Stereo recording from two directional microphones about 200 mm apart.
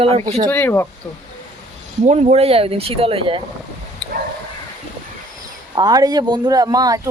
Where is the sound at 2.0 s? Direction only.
35° right (ahead or behind).